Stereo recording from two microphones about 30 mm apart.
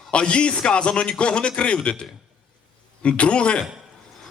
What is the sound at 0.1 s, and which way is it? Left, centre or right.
A man's voice, left.